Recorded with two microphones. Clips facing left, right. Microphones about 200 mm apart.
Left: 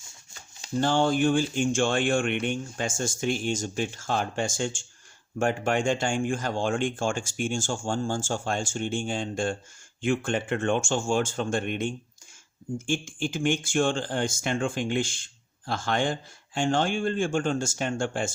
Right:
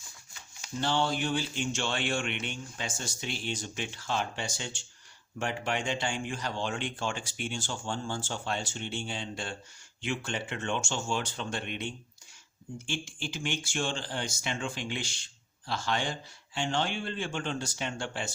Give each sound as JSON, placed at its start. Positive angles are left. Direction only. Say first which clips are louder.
{"t": 0.8, "sound": "speech", "louder": "left 7 dB", "side_deg": 50}